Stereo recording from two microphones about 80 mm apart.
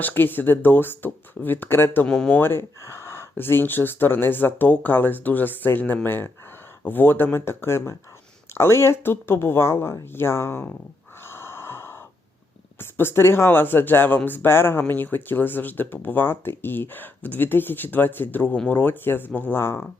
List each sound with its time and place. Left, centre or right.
0.0 s speech: left
2.0 s speech: centre
2.4 s speech: left
11.2 s gasp: left
12.8 s speech: left